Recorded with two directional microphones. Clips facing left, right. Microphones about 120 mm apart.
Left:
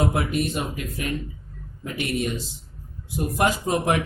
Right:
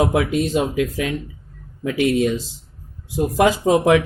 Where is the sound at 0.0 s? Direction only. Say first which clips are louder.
Right 5 dB; 90° right.